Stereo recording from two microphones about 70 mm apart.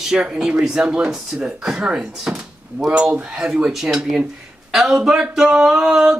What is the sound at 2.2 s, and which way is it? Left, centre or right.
Drawer open or close, centre.